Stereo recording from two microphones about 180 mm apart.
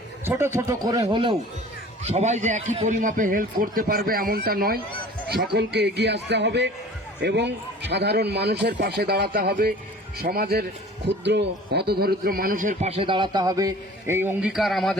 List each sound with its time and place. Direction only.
0.3 s a man's voice: 15° right (ahead or behind)
2.0 s a man's voice: 40° right (ahead or behind); by 4.8 s 55° right (ahead or behind)
5.5 s a man's voice: 70° right (ahead or behind); by 12.9 s 45° right (ahead or behind)
13.0 s a man's voice: 25° right (ahead or behind); by 14.9 s centre (ahead or behind)